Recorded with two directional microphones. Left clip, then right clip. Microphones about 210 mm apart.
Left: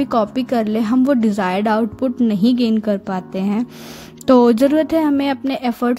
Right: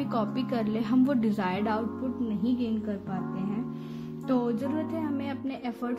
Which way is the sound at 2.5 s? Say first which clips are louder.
Left 14 dB; 50° left (ahead or behind).